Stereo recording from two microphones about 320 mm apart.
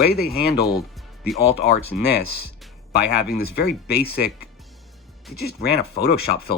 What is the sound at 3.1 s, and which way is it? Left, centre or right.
Speech, left.